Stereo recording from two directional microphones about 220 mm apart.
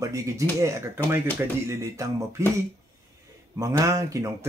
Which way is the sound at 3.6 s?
15° right (ahead or behind).